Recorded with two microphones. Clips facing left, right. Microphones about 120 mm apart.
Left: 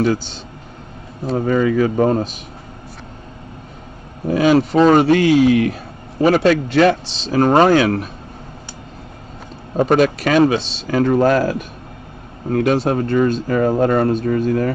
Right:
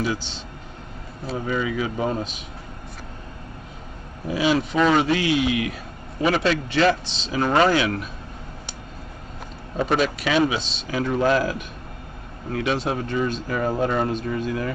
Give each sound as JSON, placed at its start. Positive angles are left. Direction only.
{"t": 1.3, "sound": "speech", "side_deg": 50}
{"t": 4.3, "sound": "speech", "side_deg": 50}
{"t": 9.8, "sound": "speech", "side_deg": 45}